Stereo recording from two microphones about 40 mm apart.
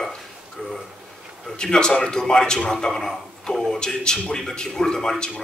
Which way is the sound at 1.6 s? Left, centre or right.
Centre.